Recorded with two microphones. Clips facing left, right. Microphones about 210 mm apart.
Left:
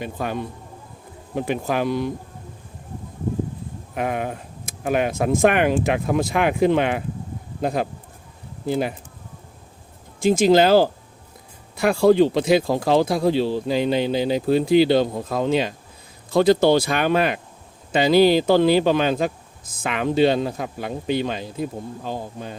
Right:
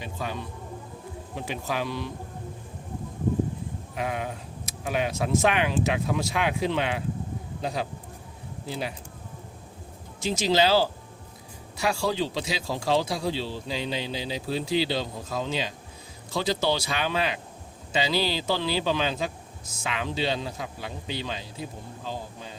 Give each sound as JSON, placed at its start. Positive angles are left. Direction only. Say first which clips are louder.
{"t": 0.0, "sound": "speech", "louder": "left 7 dB", "side_deg": 55}
{"t": 3.9, "sound": "speech", "louder": "left 6 dB", "side_deg": 55}
{"t": 10.2, "sound": "speech", "louder": "left 8 dB", "side_deg": 50}